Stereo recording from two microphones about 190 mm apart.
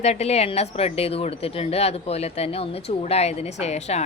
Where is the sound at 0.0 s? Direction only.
35° left (ahead or behind).